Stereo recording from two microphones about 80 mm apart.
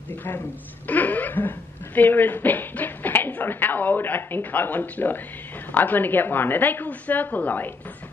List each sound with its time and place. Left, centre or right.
0.8 s a woman's voice: left